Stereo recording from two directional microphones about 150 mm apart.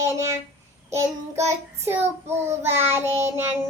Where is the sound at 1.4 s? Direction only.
15° right (ahead or behind).